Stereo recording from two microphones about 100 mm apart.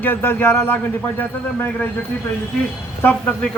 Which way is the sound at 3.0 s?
15° left (ahead or behind).